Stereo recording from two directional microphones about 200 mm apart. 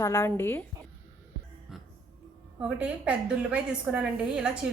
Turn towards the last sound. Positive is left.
turn(degrees=-5)  # may be behind; listen again after turning